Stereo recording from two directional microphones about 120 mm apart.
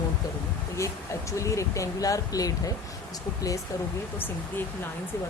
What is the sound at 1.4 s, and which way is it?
Speech, 25° left (ahead or behind).